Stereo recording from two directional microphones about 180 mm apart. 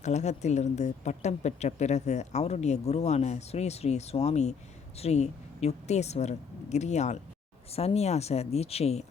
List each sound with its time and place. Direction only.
0.0 s speech: 40° left (ahead or behind)